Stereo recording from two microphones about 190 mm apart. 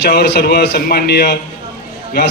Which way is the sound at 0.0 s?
60° left (ahead or behind).